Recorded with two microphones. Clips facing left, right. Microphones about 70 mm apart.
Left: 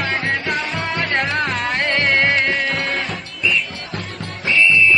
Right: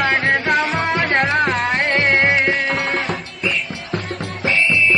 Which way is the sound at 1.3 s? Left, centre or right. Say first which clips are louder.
Right 3 dB; centre.